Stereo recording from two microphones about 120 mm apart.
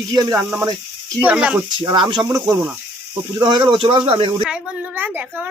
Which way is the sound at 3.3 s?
40° right (ahead or behind).